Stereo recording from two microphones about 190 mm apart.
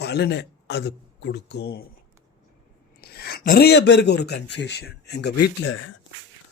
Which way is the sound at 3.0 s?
55° left (ahead or behind).